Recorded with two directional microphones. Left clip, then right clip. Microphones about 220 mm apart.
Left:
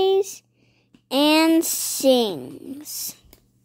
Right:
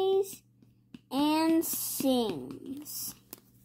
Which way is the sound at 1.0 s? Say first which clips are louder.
Left 10 dB; 30° left (ahead or behind).